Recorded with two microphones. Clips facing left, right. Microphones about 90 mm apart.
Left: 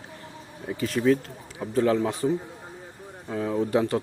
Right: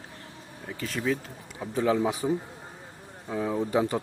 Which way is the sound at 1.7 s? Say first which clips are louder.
Left 2 dB; 10° right (ahead or behind).